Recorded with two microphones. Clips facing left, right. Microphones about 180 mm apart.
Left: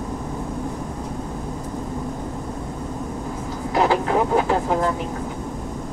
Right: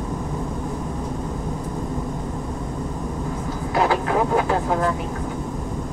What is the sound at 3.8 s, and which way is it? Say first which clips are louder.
Vehicle: left 1 dB; 25° left (ahead or behind).